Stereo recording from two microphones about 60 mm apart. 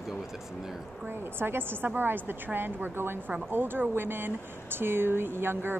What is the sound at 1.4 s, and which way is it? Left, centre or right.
Speech, right.